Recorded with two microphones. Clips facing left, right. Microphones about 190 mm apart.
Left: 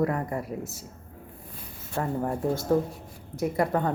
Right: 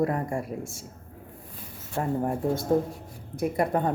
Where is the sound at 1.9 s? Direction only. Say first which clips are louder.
Right 1 dB; 25° right (ahead or behind).